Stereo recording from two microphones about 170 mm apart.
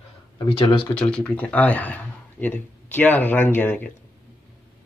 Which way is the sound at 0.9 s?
5° left (ahead or behind).